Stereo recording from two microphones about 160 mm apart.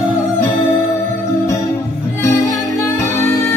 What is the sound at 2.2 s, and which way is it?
Music, 15° left (ahead or behind).